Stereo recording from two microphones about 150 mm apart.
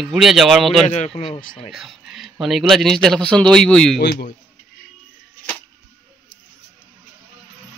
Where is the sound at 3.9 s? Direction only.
90° left.